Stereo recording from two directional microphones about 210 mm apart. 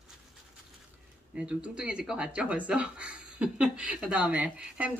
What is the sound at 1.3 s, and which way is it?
Speech, 5° right (ahead or behind).